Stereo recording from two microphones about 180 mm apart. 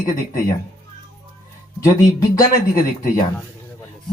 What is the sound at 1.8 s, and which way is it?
Speech, 20° left (ahead or behind).